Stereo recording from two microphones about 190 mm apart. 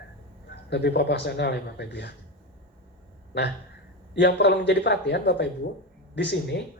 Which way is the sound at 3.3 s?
65° left (ahead or behind).